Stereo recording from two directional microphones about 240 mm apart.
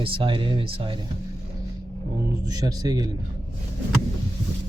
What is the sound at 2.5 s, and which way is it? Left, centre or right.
Speech, centre.